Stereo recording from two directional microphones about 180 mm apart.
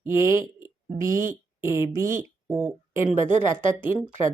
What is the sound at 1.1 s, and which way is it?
Speech, 50° right (ahead or behind).